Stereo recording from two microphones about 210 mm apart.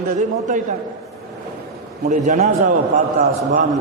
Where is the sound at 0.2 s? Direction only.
35° right (ahead or behind).